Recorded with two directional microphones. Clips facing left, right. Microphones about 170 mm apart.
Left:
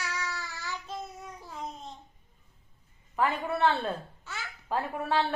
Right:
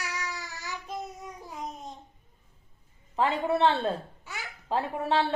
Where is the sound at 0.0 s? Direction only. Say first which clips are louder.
Even; 15° right (ahead or behind).